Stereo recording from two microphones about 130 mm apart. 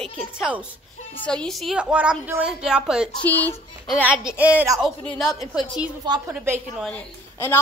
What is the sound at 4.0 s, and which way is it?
Speech, 10° right (ahead or behind).